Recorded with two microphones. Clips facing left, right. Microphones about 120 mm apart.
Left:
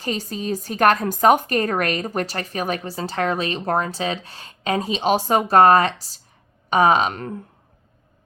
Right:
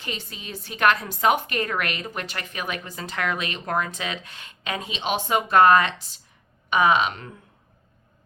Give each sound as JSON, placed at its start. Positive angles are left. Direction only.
{"t": 0.0, "sound": "a woman's voice", "side_deg": 40}